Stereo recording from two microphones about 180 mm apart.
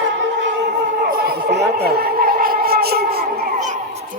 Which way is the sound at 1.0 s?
60° right (ahead or behind).